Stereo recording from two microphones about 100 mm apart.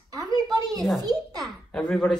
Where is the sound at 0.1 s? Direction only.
35° right (ahead or behind).